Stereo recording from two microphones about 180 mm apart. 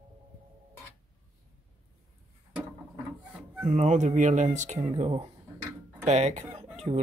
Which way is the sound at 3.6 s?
40° right (ahead or behind).